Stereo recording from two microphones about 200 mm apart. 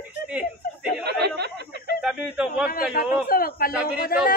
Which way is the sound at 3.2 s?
45° left (ahead or behind).